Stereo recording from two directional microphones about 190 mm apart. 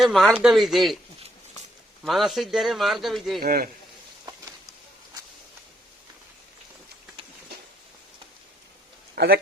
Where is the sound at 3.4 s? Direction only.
50° right (ahead or behind).